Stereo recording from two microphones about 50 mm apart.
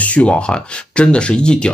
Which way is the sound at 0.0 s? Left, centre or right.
Left.